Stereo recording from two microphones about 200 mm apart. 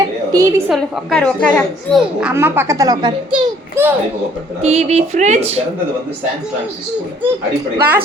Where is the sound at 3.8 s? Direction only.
15° right (ahead or behind).